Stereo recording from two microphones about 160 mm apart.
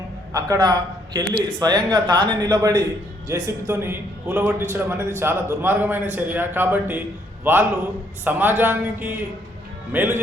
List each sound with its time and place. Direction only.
0.3 s a man's voice: 20° right (ahead or behind)
8.2 s a man's voice: 10° right (ahead or behind)